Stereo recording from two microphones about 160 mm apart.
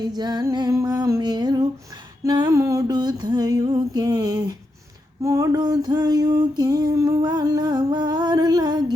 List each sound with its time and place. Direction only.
0.2 s music: 25° right (ahead or behind)
2.2 s a sound: 25° right (ahead or behind)
5.2 s female singing: 20° right (ahead or behind)